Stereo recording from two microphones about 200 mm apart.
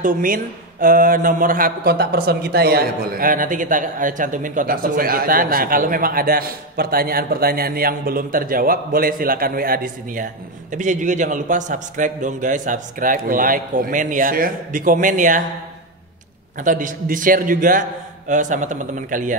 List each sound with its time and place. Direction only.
0.0 s a man's voice: 45° right (ahead or behind)
16.6 s a man's voice: 40° right (ahead or behind)